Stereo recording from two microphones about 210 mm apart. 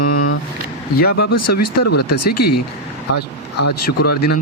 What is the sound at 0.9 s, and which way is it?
Speech, 50° left (ahead or behind).